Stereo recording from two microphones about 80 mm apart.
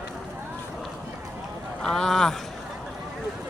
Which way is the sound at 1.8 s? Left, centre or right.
Centre.